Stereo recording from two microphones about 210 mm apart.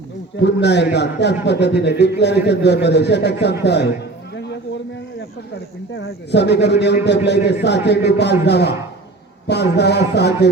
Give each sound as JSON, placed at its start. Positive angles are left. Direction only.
{"t": 0.4, "sound": "a man's voice", "side_deg": 55}
{"t": 5.9, "sound": "a man's voice", "side_deg": 55}